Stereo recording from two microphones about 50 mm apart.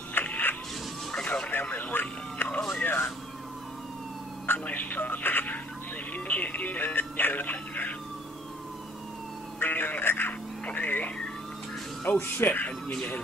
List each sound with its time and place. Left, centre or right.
0.1 s a sound: left
1.2 s music: left
1.5 s a sound: left
2.8 s vehicle: left
4.6 s music: left
9.6 s music: left
12.2 s speech: left